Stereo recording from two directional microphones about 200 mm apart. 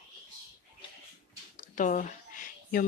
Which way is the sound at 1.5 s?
40° left (ahead or behind).